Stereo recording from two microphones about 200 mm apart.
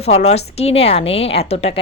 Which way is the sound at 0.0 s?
35° left (ahead or behind).